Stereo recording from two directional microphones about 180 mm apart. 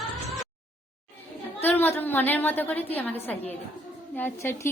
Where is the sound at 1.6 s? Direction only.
10° left (ahead or behind).